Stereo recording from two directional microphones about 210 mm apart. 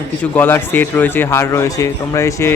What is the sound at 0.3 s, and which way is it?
Speech, 10° left (ahead or behind).